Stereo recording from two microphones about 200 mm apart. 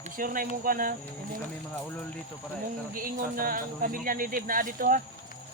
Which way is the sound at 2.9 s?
45° right (ahead or behind).